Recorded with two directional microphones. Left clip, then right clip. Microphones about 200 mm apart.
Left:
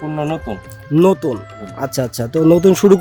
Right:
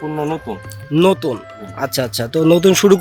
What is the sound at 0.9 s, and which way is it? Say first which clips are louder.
Speech: left 1 dB; 15° left (ahead or behind).